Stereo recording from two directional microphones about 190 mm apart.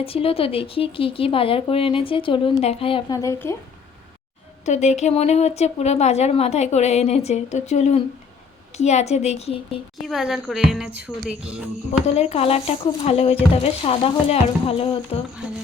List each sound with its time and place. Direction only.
0.0 s speech: 30° left (ahead or behind); by 3.5 s 15° left (ahead or behind)
4.6 s speech: 35° left (ahead or behind)
10.1 s a woman's voice: centre (ahead or behind)
12.0 s speech: 35° left (ahead or behind)